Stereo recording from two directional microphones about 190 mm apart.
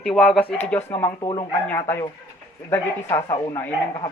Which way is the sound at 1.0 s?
25° left (ahead or behind).